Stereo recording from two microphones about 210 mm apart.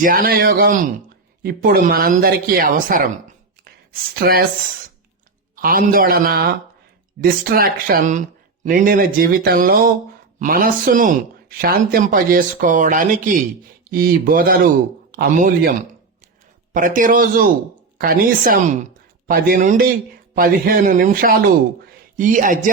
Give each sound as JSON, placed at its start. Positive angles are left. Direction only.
{"t": 0.0, "sound": "a woman's voice", "side_deg": -40}
{"t": 4.1, "sound": "a woman's voice", "side_deg": -45}
{"t": 5.5, "sound": "a woman's voice", "side_deg": -45}
{"t": 16.7, "sound": "a woman's voice", "side_deg": -40}